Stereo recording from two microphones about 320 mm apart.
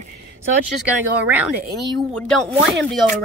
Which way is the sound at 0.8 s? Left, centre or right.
Centre.